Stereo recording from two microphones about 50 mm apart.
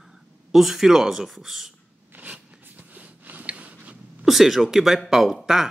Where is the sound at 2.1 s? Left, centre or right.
Right.